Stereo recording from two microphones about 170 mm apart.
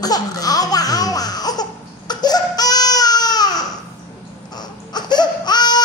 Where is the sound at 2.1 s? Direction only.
25° left (ahead or behind).